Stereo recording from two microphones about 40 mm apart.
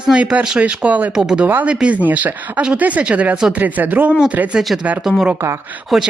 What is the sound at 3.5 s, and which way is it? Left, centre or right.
Speech, right.